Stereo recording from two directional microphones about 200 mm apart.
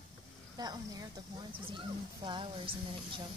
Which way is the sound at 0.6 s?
20° right (ahead or behind).